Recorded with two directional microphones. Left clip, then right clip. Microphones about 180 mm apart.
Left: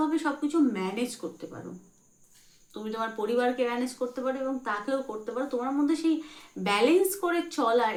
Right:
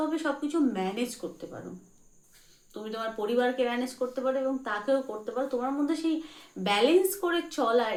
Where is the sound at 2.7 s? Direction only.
20° left (ahead or behind).